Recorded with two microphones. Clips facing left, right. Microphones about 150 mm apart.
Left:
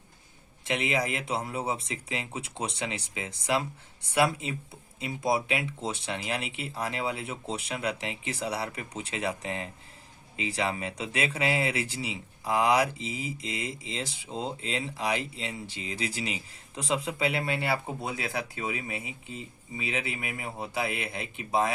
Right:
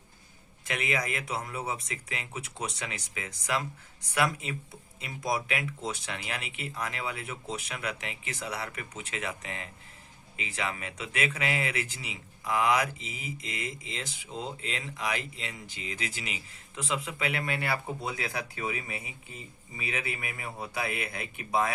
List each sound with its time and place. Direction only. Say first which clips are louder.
0.6 s speech: left 3 dB; 30° left (ahead or behind)